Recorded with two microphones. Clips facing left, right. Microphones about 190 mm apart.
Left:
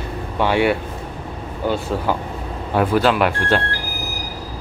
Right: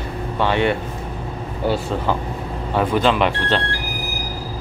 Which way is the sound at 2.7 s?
5° left (ahead or behind).